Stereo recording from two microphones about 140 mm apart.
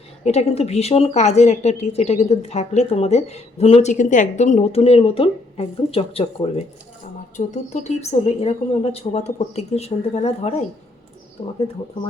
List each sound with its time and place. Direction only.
0.3 s a woman's voice: 50° left (ahead or behind)
7.3 s a woman's voice: 55° left (ahead or behind)